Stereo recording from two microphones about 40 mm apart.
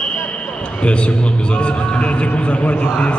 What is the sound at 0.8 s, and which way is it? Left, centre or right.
A man's voice, left.